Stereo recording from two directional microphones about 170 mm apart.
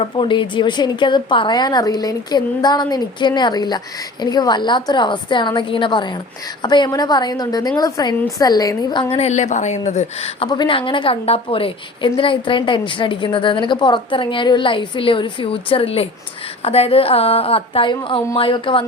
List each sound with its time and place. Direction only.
0.0 s a woman's voice: 30° left (ahead or behind)